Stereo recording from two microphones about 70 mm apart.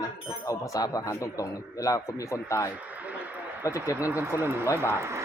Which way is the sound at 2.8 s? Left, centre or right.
Right.